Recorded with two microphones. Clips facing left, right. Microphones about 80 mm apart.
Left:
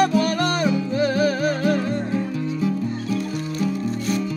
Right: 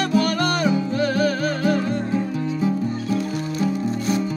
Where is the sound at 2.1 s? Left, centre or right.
Right.